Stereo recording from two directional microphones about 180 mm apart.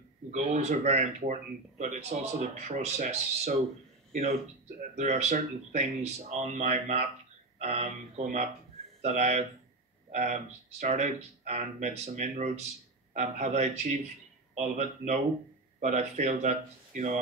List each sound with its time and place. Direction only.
0.3 s speech: 40° right (ahead or behind)